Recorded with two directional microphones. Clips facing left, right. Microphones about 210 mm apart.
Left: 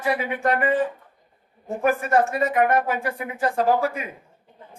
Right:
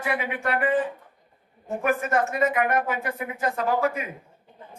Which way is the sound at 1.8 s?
35° left (ahead or behind).